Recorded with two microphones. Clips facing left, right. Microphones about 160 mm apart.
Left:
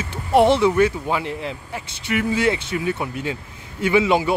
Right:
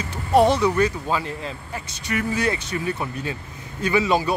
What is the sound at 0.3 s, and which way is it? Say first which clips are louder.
Speech: left 2 dB; 20° left (ahead or behind).